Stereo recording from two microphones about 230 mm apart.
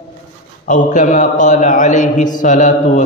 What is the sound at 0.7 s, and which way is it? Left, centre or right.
A man's voice, left.